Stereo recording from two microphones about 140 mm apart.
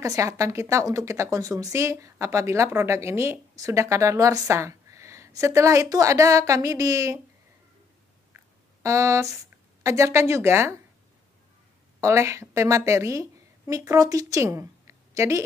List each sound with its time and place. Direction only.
0.0 s speech: 25° right (ahead or behind)
8.8 s speech: 20° right (ahead or behind)
12.0 s a woman's voice: 20° right (ahead or behind)